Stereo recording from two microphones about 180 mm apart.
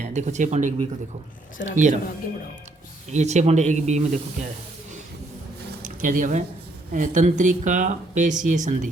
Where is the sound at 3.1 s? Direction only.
40° right (ahead or behind).